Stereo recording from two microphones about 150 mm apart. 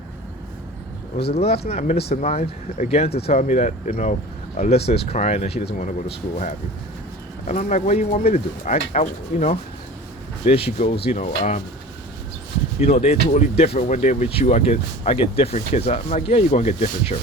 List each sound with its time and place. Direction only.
1.1 s speech: 45° left (ahead or behind)
5.7 s speech: 60° left (ahead or behind)
12.8 s speech: 45° left (ahead or behind)